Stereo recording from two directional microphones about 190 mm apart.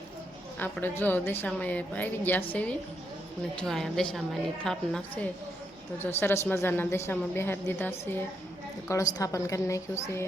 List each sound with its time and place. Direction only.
0.6 s a woman's voice: 10° left (ahead or behind)